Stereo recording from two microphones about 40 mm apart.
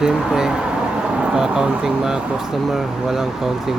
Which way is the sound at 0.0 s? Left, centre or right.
Centre.